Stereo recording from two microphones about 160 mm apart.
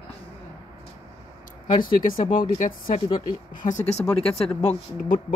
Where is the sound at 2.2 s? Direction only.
30° left (ahead or behind).